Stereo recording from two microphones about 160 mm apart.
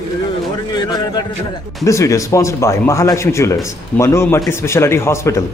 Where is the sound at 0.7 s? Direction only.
25° left (ahead or behind).